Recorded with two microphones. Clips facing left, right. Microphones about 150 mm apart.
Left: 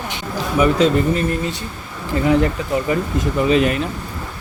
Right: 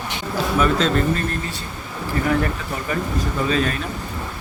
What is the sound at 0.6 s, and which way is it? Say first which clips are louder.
Speech: left 5 dB; 10° left (ahead or behind).